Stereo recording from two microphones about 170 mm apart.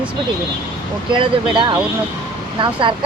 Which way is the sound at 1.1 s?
30° right (ahead or behind).